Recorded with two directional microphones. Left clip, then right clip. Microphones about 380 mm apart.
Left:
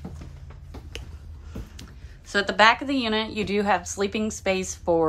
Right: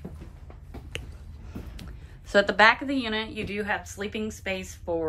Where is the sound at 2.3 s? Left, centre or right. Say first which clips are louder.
Even; centre.